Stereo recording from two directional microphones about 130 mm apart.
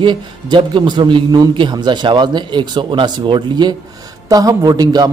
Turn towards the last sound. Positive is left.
turn(degrees=-30)  # may be behind; listen again after turning